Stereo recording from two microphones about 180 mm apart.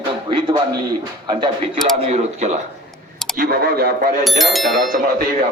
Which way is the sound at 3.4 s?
55° right (ahead or behind).